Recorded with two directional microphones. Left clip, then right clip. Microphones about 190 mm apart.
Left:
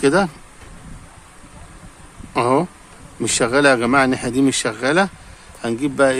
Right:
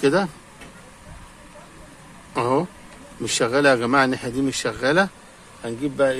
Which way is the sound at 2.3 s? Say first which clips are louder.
Left 4 dB; 15° left (ahead or behind).